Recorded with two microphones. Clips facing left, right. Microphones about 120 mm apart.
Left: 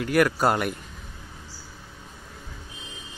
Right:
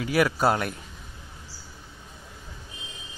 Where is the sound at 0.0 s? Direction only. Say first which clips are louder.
Left 1 dB; 5° right (ahead or behind).